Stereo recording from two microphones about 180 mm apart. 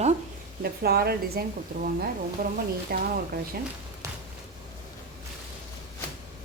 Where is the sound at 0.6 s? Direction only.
60° right (ahead or behind).